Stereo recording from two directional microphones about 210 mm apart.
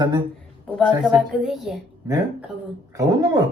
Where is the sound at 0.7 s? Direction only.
Centre (ahead or behind).